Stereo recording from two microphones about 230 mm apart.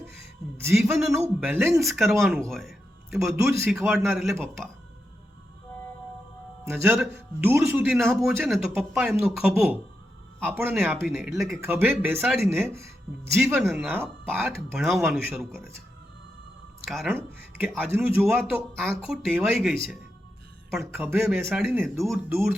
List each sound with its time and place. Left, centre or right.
0.5 s a man's voice: centre
3.2 s a man's voice: centre
6.7 s a man's voice: centre
16.9 s a man's voice: centre